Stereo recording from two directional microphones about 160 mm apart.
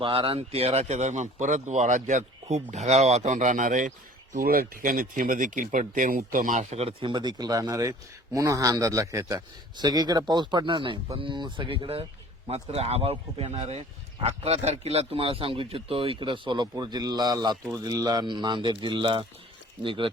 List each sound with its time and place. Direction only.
0.0 s speech: 35° right (ahead or behind)